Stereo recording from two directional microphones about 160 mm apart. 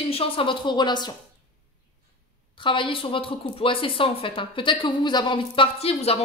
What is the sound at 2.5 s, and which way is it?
Speech, 30° left (ahead or behind).